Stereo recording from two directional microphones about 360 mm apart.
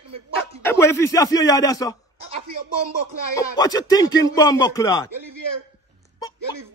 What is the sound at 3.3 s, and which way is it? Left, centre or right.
Speech, centre.